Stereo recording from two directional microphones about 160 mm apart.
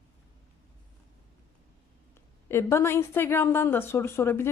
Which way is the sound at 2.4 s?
15° left (ahead or behind).